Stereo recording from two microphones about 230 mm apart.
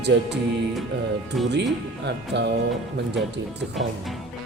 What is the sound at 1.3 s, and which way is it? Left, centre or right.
Speech, centre.